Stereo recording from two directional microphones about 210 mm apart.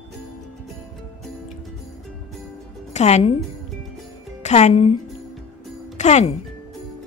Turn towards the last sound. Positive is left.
turn(degrees=30)  # may be behind; listen again after turning